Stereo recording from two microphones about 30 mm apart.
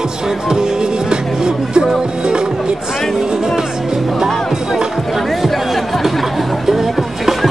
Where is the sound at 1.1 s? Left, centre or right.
Right.